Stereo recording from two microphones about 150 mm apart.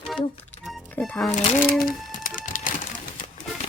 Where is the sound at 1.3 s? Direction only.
45° left (ahead or behind).